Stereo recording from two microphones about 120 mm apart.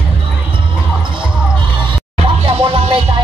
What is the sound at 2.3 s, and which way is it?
Music, 55° right (ahead or behind).